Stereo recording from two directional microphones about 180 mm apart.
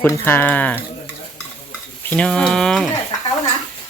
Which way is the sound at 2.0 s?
10° left (ahead or behind).